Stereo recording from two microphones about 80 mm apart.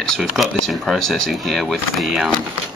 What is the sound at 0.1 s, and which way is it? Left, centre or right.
Speech, centre.